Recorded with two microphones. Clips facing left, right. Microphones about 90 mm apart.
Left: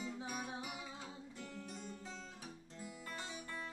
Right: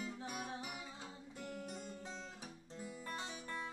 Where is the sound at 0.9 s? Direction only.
20° right (ahead or behind).